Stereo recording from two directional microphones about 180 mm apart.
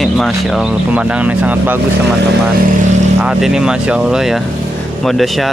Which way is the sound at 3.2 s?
5° right (ahead or behind).